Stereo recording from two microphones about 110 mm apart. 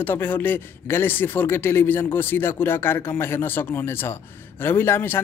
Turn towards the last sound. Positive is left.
turn(degrees=20)  # may be behind; listen again after turning